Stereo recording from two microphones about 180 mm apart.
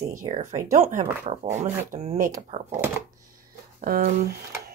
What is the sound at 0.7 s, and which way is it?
Speech, 45° right (ahead or behind).